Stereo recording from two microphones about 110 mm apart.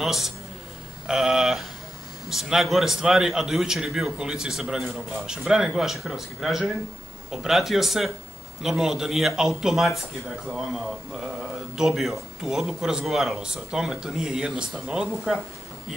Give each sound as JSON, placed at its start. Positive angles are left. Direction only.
{"t": 0.0, "sound": "a man's voice", "side_deg": 0}
{"t": 11.7, "sound": "a man's voice", "side_deg": -5}